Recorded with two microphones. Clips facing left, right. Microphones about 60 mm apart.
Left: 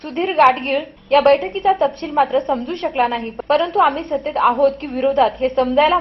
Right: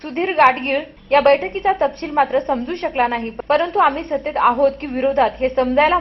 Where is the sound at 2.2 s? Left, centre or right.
Right.